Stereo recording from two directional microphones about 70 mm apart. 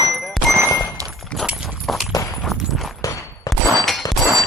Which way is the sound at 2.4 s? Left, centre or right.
Centre.